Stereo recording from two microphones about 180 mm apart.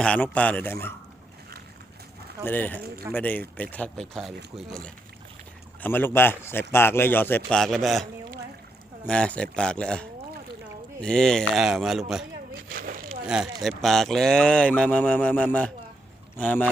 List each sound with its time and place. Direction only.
0.0 s a man's voice: 5° left (ahead or behind)
2.4 s a man's voice: 10° left (ahead or behind)
2.8 s speech: 60° right (ahead or behind)
3.1 s a man's voice: 10° left (ahead or behind)
9.0 s speech: 5° left (ahead or behind)
12.7 s a sound: 50° right (ahead or behind)
13.2 s a man's voice: 5° right (ahead or behind)